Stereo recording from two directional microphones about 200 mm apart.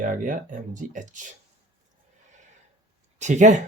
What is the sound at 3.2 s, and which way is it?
Speech, 35° right (ahead or behind).